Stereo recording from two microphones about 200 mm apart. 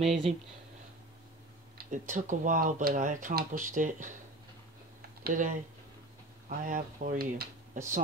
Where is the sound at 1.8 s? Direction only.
40° right (ahead or behind).